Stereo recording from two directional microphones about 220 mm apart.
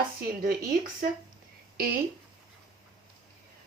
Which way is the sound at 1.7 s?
40° right (ahead or behind).